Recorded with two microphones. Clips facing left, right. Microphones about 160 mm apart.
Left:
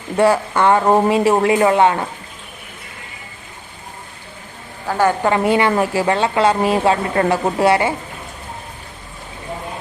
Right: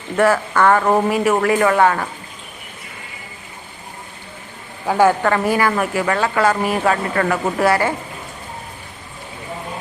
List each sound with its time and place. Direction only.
0.5 s a woman's voice: 20° left (ahead or behind)
4.9 s a woman's voice: 10° right (ahead or behind)
5.2 s a woman's voice: 20° left (ahead or behind)